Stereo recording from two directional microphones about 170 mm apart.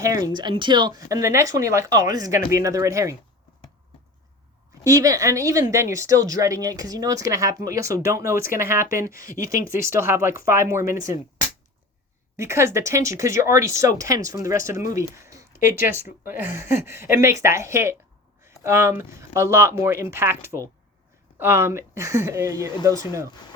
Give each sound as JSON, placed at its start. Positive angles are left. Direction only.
{"t": 0.0, "sound": "speech", "side_deg": -20}
{"t": 4.7, "sound": "speech", "side_deg": -20}